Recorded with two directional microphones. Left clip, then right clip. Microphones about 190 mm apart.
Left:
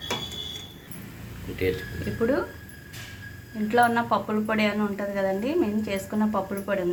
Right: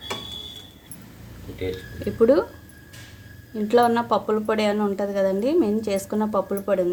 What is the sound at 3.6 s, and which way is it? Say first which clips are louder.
A woman's voice: right 3 dB; 70° right (ahead or behind).